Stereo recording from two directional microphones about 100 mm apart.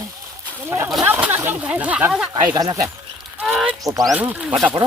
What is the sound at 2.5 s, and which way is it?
Speech, 35° right (ahead or behind).